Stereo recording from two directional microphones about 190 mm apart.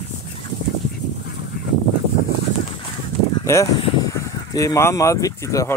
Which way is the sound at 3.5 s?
15° left (ahead or behind).